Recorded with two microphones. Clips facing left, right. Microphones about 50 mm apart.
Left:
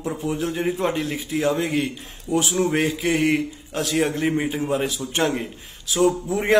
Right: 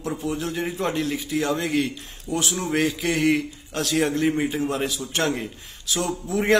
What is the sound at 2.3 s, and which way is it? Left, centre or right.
Speech, right.